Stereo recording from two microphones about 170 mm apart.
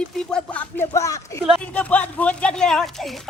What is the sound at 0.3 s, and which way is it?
Speech, 5° left (ahead or behind).